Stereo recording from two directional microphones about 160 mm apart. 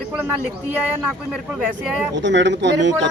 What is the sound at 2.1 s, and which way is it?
Speech, 90° right.